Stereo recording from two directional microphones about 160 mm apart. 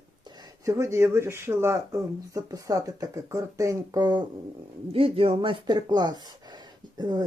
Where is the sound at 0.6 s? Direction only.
20° right (ahead or behind).